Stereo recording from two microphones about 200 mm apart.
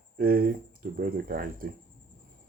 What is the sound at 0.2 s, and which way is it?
Speech, 50° right (ahead or behind).